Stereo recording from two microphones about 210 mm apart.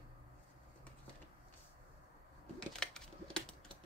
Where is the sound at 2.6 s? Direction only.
5° left (ahead or behind).